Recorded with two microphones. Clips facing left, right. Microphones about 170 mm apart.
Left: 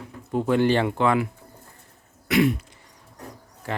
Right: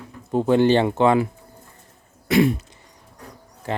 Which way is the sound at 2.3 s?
25° right (ahead or behind).